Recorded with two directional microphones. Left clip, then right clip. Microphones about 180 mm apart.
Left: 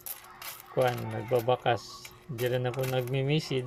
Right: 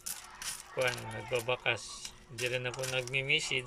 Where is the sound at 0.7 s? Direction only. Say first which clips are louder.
Left 6 dB; 30° left (ahead or behind).